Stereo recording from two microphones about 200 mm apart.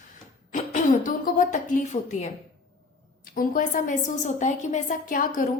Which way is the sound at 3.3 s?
45° left (ahead or behind).